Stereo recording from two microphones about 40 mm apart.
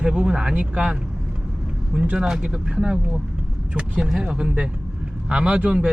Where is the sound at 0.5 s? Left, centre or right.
Right.